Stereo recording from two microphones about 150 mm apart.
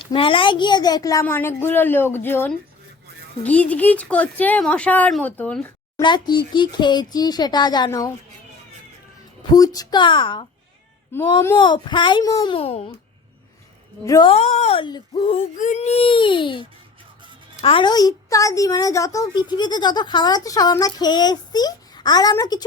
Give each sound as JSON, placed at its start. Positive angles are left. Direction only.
{"t": 0.0, "sound": "a child's voice", "side_deg": 35}
{"t": 1.2, "sound": "a woman's voice", "side_deg": 15}
{"t": 6.0, "sound": "a woman's voice", "side_deg": 30}
{"t": 9.5, "sound": "a child's voice", "side_deg": 25}
{"t": 11.1, "sound": "a woman's voice", "side_deg": 15}
{"t": 11.5, "sound": "a child's voice", "side_deg": 30}
{"t": 12.5, "sound": "a child's voice", "side_deg": 40}
{"t": 14.0, "sound": "a woman's voice", "side_deg": 20}
{"t": 14.3, "sound": "a child's voice", "side_deg": 45}
{"t": 15.2, "sound": "a woman's voice", "side_deg": 55}